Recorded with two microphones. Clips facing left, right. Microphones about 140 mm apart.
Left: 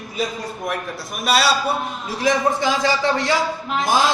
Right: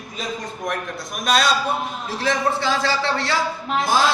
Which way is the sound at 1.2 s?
5° left (ahead or behind).